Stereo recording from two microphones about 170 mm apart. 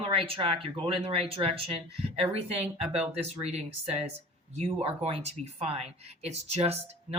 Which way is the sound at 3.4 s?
40° right (ahead or behind).